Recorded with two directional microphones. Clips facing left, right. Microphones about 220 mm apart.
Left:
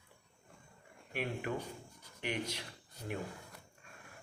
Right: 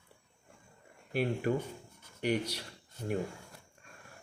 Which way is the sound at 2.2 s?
40° right (ahead or behind).